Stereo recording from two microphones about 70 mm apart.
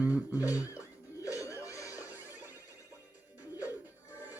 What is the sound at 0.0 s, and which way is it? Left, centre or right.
Guitar, right.